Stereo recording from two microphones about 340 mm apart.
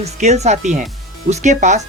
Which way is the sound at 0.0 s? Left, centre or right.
Centre.